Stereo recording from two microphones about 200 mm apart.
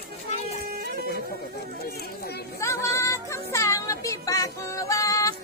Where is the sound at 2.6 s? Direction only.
15° left (ahead or behind).